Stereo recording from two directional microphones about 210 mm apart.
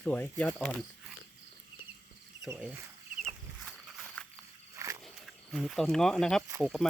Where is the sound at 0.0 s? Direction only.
10° left (ahead or behind).